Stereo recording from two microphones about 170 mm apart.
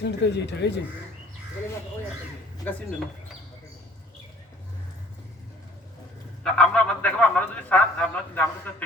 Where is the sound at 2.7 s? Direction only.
10° left (ahead or behind).